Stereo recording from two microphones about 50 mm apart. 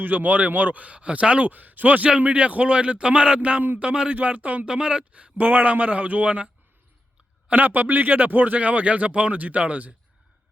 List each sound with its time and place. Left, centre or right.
0.0 s speech: right
4.1 s speech: right
4.6 s speech: centre
5.4 s speech: right